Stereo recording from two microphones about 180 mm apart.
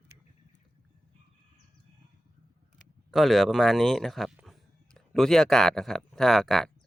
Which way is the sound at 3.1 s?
Centre (ahead or behind).